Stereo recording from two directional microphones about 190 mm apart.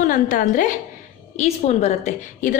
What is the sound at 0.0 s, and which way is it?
A woman's voice, 45° left (ahead or behind).